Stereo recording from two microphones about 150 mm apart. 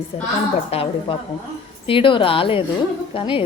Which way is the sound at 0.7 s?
40° left (ahead or behind).